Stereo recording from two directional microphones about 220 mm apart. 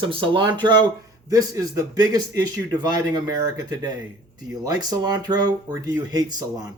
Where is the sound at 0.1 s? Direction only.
20° right (ahead or behind).